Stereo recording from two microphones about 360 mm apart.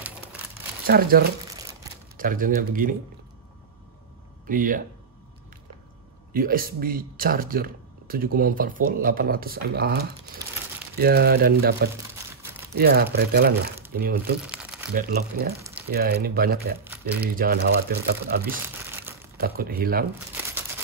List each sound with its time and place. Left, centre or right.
0.8 s speech: right
1.5 s crumpling: centre
2.1 s speech: right
4.5 s speech: right
6.3 s speech: right
14.4 s crumpling: centre
15.0 s speech: right
16.8 s crumpling: centre
17.4 s speech: right
19.4 s speech: right